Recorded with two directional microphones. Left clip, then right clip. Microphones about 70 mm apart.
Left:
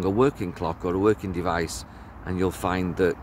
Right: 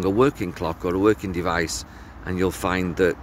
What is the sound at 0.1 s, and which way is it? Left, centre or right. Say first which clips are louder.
Speech: right 2 dB; left.